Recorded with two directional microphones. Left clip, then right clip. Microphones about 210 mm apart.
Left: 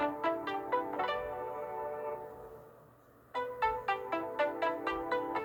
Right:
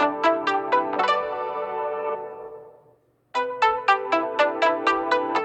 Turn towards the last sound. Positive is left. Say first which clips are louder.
# right 12 dB
turn(degrees=-45)  # may be behind; listen again after turning